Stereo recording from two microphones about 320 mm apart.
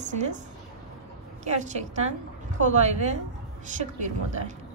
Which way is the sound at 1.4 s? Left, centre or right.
Right.